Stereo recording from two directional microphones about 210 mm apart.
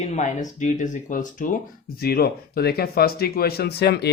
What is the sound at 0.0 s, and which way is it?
Speech, 35° left (ahead or behind).